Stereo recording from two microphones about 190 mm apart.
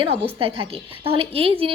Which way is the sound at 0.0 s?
30° right (ahead or behind).